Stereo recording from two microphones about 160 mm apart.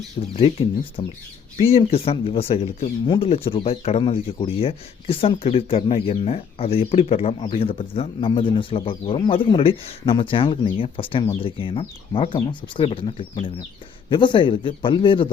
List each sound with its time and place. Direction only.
0.3 s speech: 35° left (ahead or behind)